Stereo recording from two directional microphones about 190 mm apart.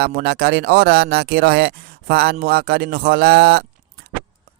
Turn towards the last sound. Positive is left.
turn(degrees=-55)  # may be behind; listen again after turning